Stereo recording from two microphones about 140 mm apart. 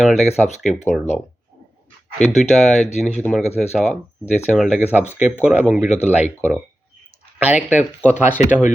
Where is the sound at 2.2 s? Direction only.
55° left (ahead or behind).